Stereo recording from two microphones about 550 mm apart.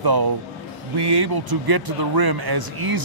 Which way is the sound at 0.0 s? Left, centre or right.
Right.